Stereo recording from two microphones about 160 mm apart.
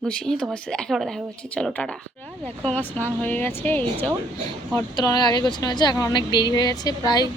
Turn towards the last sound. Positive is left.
turn(degrees=25)  # may be behind; listen again after turning